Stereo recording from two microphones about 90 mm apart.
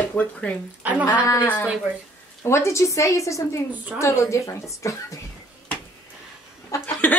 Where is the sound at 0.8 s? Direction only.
15° right (ahead or behind).